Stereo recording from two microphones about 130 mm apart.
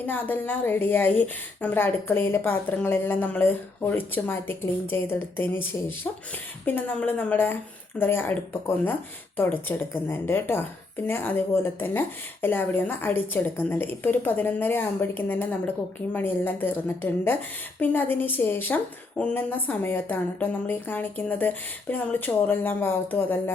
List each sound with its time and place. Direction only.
0.0 s a woman's voice: 15° left (ahead or behind)